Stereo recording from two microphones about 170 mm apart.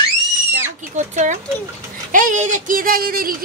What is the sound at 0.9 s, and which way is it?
Speech, 45° right (ahead or behind).